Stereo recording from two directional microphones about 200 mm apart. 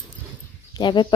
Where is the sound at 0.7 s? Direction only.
20° left (ahead or behind).